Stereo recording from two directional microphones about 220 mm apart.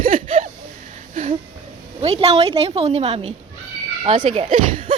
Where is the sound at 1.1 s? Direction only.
35° right (ahead or behind).